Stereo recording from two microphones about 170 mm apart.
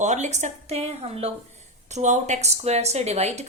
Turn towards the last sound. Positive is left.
turn(degrees=-40)  # may be behind; listen again after turning